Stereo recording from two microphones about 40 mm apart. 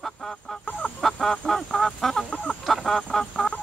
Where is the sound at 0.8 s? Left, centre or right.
Right.